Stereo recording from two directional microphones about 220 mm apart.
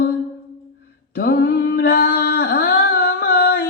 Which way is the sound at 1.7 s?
45° left (ahead or behind).